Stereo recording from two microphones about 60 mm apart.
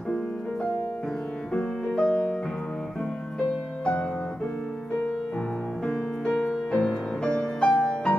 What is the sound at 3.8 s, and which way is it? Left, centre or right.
Music, centre.